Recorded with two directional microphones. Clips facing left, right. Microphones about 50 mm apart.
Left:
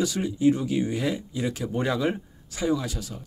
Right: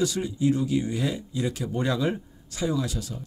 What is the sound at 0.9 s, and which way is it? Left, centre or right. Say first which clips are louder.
Speech: left 1 dB; left.